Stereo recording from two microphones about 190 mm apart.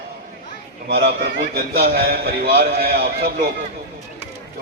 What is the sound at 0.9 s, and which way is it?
A man's voice, 55° right (ahead or behind).